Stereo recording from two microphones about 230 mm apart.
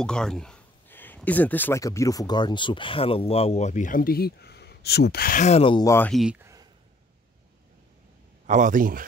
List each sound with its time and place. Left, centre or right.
0.0 s speech: centre
8.5 s speech: right